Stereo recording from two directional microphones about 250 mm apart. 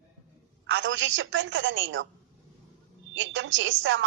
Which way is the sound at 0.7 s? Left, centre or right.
Right.